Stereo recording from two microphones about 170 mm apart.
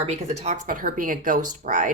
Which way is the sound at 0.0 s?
40° right (ahead or behind).